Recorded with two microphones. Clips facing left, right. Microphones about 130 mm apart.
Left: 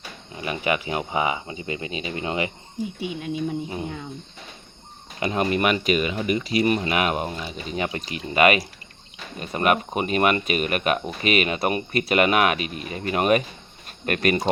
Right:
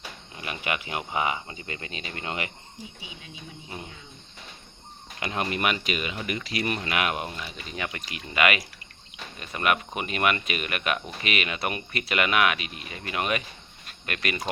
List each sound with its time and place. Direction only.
0.3 s speech: 30° left (ahead or behind)
3.0 s speech: 55° left (ahead or behind)
3.8 s speech: 70° left (ahead or behind)
5.2 s speech: 30° left (ahead or behind)